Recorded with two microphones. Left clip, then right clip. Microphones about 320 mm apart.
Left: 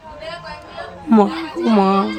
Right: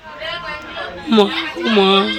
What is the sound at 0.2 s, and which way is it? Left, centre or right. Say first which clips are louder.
Chatter: right 6 dB; left.